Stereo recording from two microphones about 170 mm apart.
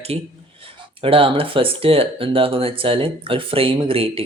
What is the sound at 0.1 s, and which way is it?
Speech, 35° right (ahead or behind).